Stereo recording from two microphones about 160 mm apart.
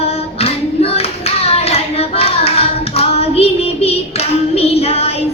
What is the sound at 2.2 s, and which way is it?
Hands, 40° left (ahead or behind).